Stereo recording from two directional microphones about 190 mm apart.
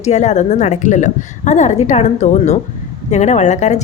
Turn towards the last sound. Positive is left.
turn(degrees=40)  # may be behind; listen again after turning